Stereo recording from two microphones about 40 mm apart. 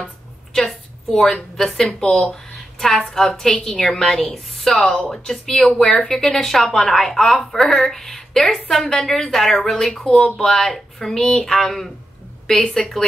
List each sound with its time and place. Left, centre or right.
0.0 s a sound: centre
1.9 s speech: centre
2.5 s a sound: centre
3.2 s speech: centre
9.6 s speech: centre
10.0 s speech: left
10.4 s speech: centre